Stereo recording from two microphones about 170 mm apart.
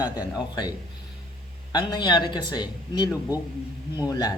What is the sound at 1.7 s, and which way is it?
Speech, 25° left (ahead or behind).